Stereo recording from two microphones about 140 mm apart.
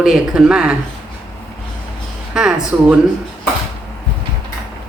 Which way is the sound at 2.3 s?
5° right (ahead or behind).